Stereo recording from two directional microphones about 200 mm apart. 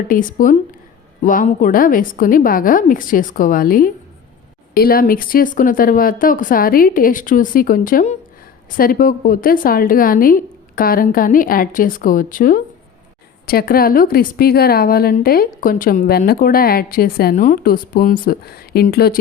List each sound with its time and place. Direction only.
0.1 s a woman's voice: 40° left (ahead or behind)